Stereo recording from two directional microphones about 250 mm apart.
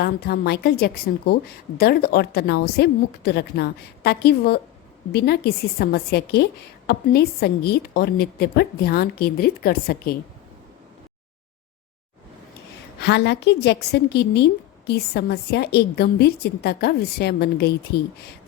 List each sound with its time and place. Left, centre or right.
0.0 s a woman's voice: left
13.0 s a woman's voice: left